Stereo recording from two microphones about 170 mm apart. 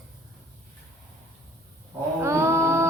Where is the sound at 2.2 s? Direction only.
15° right (ahead or behind).